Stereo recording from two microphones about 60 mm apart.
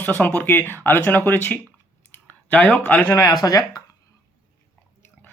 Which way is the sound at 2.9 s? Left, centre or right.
Left.